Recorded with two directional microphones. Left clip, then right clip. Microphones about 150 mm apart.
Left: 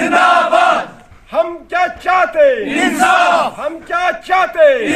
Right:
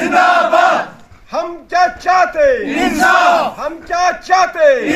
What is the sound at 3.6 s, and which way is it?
A man's voice, 10° left (ahead or behind).